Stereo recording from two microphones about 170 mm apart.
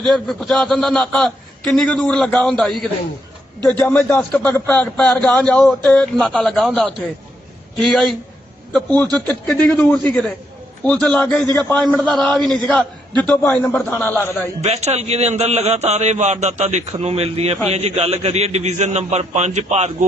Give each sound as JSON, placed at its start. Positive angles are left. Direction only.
{"t": 0.0, "sound": "a man's voice", "side_deg": 5}
{"t": 14.6, "sound": "a man's voice", "side_deg": -40}